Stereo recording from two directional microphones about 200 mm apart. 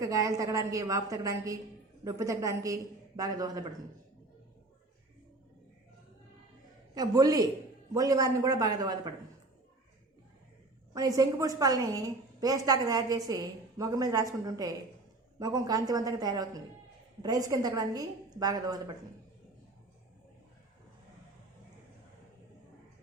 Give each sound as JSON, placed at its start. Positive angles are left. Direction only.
{"t": 0.0, "sound": "a woman's voice", "side_deg": -15}
{"t": 6.9, "sound": "a woman's voice", "side_deg": -20}
{"t": 10.9, "sound": "a woman's voice", "side_deg": -15}